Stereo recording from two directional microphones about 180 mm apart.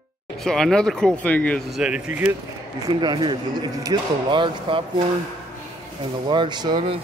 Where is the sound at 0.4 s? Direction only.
Centre (ahead or behind).